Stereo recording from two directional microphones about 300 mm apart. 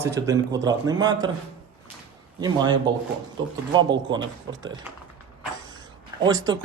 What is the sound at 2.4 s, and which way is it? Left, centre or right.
Speech, centre.